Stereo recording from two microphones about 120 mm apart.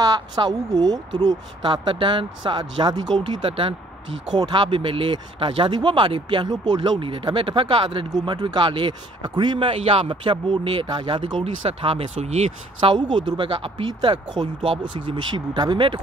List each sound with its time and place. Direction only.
0.0 s speech: 35° right (ahead or behind)
8.1 s speech: 35° right (ahead or behind); by 12.9 s 65° right (ahead or behind)
12.9 s speech: 40° right (ahead or behind)